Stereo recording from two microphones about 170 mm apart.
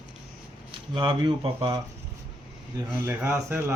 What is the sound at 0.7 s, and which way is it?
Speech, 30° right (ahead or behind).